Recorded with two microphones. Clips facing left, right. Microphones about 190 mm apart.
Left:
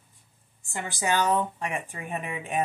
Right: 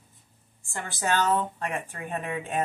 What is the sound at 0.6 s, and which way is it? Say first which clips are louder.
Speech: left 1 dB; 15° left (ahead or behind).